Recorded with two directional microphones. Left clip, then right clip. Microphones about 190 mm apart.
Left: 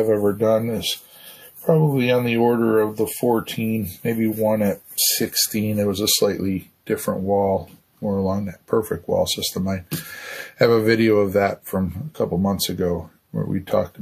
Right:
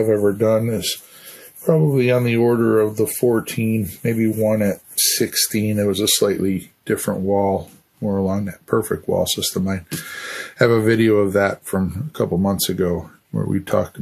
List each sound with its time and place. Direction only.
0.0 s speech: 45° right (ahead or behind)
8.3 s speech: 40° right (ahead or behind)